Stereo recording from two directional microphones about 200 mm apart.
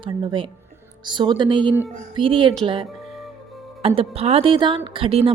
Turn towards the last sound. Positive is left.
turn(degrees=-30)  # may be behind; listen again after turning